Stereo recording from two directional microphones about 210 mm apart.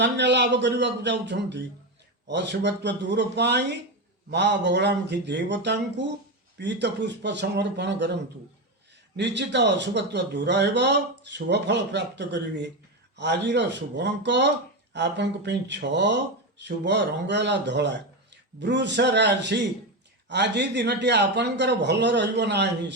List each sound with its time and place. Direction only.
0.0 s speech: 55° right (ahead or behind)
9.1 s speech: 55° right (ahead or behind)